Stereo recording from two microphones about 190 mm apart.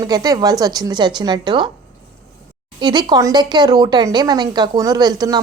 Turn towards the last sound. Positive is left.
turn(degrees=-20)  # may be behind; listen again after turning